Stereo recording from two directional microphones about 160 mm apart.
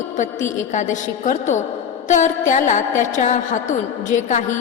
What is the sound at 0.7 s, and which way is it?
A woman's voice, 50° left (ahead or behind).